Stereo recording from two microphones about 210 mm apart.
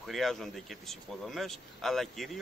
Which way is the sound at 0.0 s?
Centre (ahead or behind).